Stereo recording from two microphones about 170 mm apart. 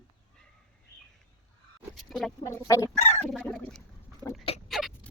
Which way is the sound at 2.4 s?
20° left (ahead or behind).